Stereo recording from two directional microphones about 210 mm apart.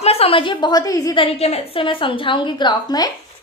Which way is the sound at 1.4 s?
30° left (ahead or behind).